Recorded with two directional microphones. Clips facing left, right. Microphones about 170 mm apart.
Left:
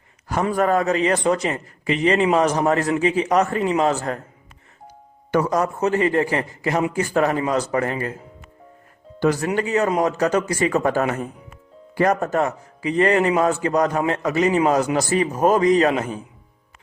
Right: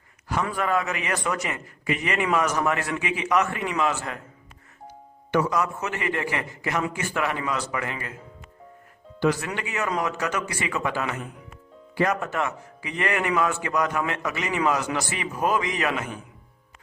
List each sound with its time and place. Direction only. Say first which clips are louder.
0.5 s a man's voice: left 10 dB; 40° left (ahead or behind)
5.3 s a man's voice: left 4 dB; 40° left (ahead or behind)
9.2 s a man's voice: left 5 dB; 45° left (ahead or behind)